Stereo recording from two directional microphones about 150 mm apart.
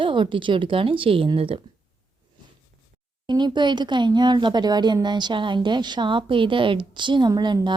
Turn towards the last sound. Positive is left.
turn(degrees=-30)  # may be behind; listen again after turning